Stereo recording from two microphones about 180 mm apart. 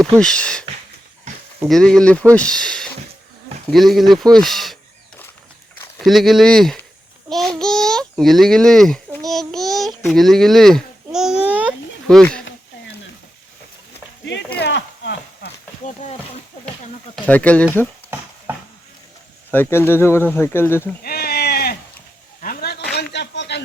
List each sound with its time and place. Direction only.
0.0 s speech: 5° left (ahead or behind)
1.3 s a sound: 40° right (ahead or behind)
1.6 s speech: 5° left (ahead or behind)
6.0 s a child's voice: centre (ahead or behind)
9.3 s child singing: centre (ahead or behind)
10.1 s babbling: centre (ahead or behind)
12.0 s speech: 5° left (ahead or behind)
14.6 s a sound: 75° left (ahead or behind)
15.8 s speech: 40° left (ahead or behind)
17.2 s speech: 10° left (ahead or behind)
19.5 s speech: 10° left (ahead or behind)
21.0 s sheep: 60° left (ahead or behind)
22.4 s a sound: 60° left (ahead or behind); by 23.6 s 75° left (ahead or behind)